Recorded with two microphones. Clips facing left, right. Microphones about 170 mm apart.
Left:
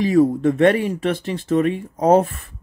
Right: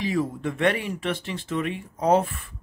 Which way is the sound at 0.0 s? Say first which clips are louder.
Left 11 dB; 45° left (ahead or behind).